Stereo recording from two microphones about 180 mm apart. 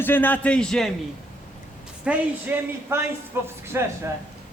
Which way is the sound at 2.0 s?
10° right (ahead or behind).